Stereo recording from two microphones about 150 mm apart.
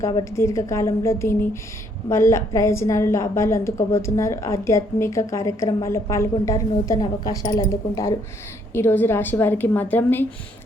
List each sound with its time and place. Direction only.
0.3 s a woman's voice: 20° left (ahead or behind)